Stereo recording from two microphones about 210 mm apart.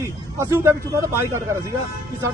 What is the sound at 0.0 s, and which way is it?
Speech, 15° right (ahead or behind).